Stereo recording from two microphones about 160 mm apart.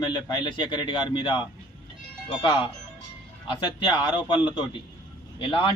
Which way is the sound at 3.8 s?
30° left (ahead or behind).